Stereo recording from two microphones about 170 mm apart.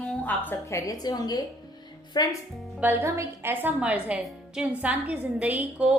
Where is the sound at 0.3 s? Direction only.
10° left (ahead or behind).